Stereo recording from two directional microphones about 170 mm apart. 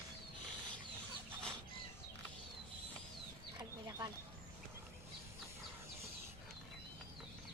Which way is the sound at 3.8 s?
20° right (ahead or behind).